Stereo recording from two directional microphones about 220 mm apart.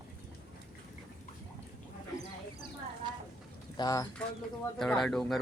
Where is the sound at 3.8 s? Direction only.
15° left (ahead or behind).